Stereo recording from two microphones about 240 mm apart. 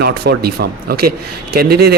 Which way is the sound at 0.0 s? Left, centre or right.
Right.